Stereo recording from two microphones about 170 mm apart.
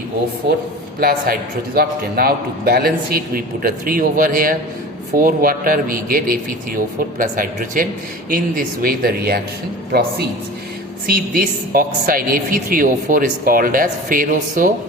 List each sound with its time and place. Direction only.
0.9 s a woman's voice: 60° right (ahead or behind)
11.0 s a woman's voice: 60° right (ahead or behind)